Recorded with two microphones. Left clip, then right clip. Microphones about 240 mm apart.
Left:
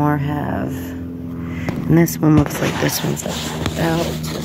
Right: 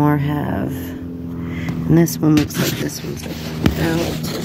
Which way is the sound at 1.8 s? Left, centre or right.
Centre.